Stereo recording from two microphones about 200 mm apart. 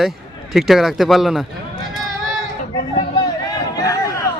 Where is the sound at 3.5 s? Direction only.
20° left (ahead or behind).